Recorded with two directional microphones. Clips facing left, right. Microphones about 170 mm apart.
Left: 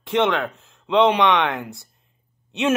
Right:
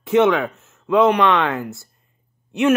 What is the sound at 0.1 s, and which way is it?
Speech, 5° right (ahead or behind).